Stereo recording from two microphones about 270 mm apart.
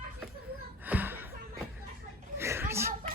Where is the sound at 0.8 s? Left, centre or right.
Centre.